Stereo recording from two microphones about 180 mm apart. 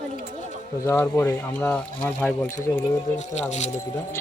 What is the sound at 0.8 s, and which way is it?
Speech, 15° left (ahead or behind).